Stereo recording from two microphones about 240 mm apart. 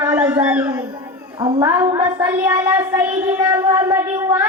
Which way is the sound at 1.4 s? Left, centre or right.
Centre.